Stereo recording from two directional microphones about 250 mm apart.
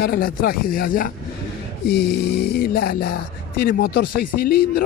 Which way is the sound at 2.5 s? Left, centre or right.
Left.